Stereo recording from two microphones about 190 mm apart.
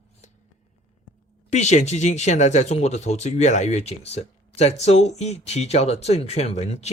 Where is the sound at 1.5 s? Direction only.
35° left (ahead or behind).